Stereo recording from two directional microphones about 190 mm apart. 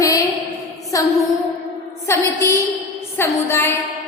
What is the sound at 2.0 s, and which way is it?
A woman's voice, 15° left (ahead or behind).